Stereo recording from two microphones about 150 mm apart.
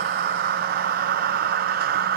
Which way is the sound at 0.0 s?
90° right.